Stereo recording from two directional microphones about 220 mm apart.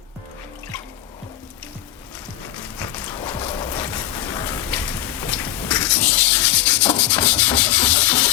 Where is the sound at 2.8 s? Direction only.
10° left (ahead or behind).